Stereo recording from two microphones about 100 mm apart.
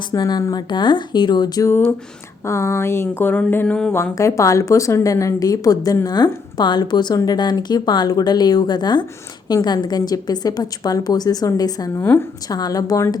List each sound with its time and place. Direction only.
0.1 s speech: 45° left (ahead or behind)
2.4 s a woman's voice: 30° left (ahead or behind)